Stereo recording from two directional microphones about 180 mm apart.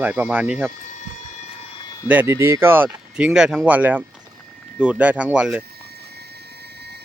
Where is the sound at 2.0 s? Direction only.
10° right (ahead or behind).